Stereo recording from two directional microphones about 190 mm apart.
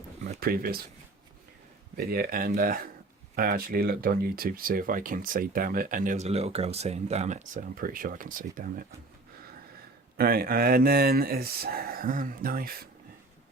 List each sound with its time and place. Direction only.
0.3 s speech: 50° right (ahead or behind)
2.0 s speech: 55° right (ahead or behind)
10.2 s speech: 50° right (ahead or behind)